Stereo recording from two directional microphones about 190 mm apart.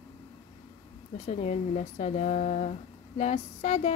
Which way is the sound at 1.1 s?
35° left (ahead or behind).